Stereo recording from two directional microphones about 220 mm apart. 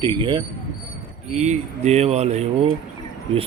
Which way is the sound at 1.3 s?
30° right (ahead or behind).